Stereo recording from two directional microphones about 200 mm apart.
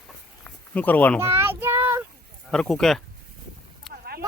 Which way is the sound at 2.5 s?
Centre (ahead or behind).